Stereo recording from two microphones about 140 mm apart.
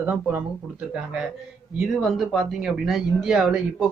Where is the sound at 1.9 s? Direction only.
Centre (ahead or behind).